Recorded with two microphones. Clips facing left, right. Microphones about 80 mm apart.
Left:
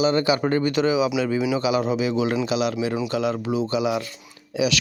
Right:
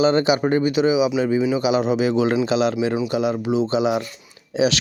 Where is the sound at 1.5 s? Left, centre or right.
Right.